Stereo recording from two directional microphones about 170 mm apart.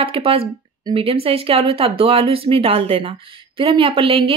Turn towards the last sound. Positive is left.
turn(degrees=-30)  # may be behind; listen again after turning